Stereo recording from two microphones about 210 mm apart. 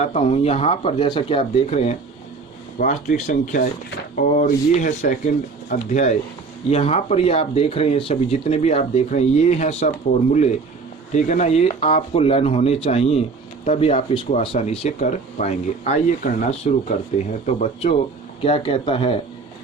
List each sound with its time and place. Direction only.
0.0 s speech: 30° left (ahead or behind)
18.4 s speech: 25° left (ahead or behind)